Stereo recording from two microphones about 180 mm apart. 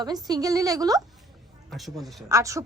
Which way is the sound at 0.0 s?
20° right (ahead or behind).